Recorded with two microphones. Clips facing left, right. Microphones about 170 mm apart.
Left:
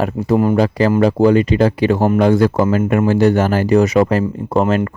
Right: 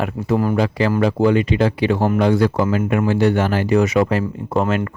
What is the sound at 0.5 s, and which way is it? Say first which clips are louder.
Speech: left 4 dB; 40° left (ahead or behind).